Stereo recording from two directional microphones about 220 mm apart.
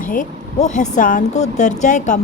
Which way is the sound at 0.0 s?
35° left (ahead or behind).